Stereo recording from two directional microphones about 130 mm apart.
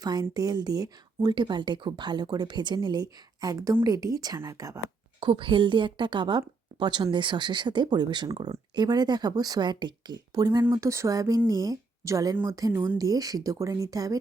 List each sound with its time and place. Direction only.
0.0 s speech: 30° right (ahead or behind)
5.2 s speech: 40° right (ahead or behind)